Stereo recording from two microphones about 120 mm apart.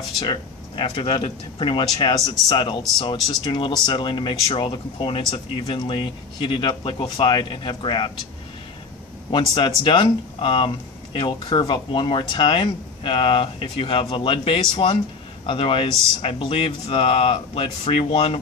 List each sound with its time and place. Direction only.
0.2 s speech: 45° left (ahead or behind)
9.5 s speech: 40° left (ahead or behind)